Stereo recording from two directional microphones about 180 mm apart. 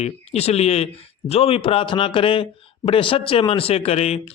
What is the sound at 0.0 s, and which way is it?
A man's voice, 35° left (ahead or behind).